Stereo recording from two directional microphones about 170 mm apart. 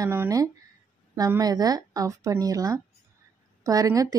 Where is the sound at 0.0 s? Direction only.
15° right (ahead or behind).